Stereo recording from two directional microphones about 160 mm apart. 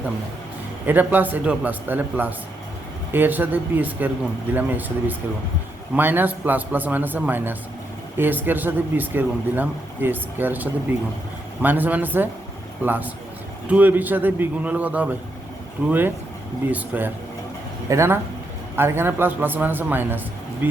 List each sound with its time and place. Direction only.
0.9 s speech: 10° right (ahead or behind)